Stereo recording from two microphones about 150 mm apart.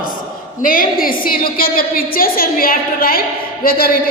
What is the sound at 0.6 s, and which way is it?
A woman's voice, 65° left (ahead or behind).